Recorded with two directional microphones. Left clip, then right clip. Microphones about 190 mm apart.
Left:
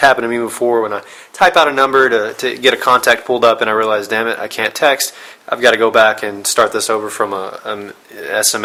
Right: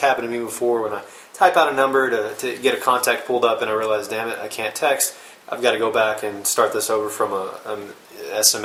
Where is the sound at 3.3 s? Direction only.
45° left (ahead or behind).